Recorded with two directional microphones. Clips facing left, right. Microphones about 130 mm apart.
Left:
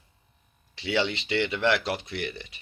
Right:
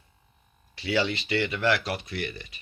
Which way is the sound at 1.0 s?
25° left (ahead or behind).